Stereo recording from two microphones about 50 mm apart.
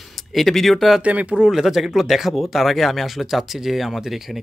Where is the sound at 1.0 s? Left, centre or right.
Right.